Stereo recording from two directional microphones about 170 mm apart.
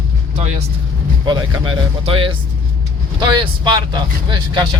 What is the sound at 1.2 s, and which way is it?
Speech, 25° right (ahead or behind).